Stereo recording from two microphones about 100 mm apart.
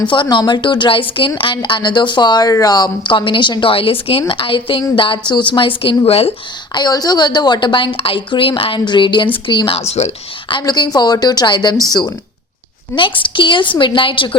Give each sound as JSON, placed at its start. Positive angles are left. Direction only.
{"t": 0.1, "sound": "a woman's voice", "side_deg": 50}
{"t": 6.7, "sound": "a woman's voice", "side_deg": 40}
{"t": 9.7, "sound": "speech", "side_deg": 90}
{"t": 10.6, "sound": "a woman's voice", "side_deg": 40}
{"t": 13.0, "sound": "a woman's voice", "side_deg": 55}